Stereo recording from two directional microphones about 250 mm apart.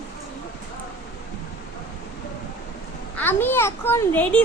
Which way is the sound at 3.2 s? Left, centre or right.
Centre.